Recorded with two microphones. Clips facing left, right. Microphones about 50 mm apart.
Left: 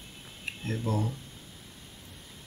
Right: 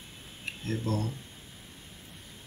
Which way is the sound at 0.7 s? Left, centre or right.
Centre.